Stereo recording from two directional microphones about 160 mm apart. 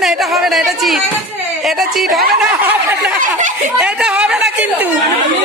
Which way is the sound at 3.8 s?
5° right (ahead or behind).